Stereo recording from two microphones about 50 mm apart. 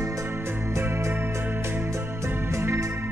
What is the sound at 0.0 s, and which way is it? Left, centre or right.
Music, right.